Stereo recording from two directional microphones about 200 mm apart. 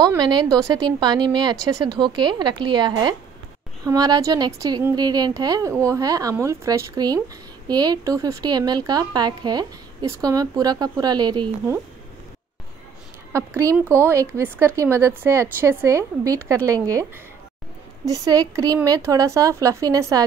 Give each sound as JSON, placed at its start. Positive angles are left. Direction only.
{"t": 0.0, "sound": "a woman's voice", "side_deg": -20}
{"t": 13.3, "sound": "a woman's voice", "side_deg": -10}
{"t": 18.0, "sound": "a woman's voice", "side_deg": -15}